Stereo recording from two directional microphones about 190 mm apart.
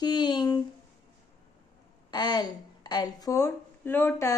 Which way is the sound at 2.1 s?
20° left (ahead or behind).